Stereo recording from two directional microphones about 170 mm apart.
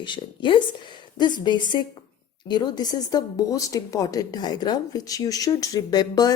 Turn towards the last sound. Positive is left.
turn(degrees=20)  # may be behind; listen again after turning